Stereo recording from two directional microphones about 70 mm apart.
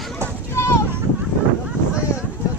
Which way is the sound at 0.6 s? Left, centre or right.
Left.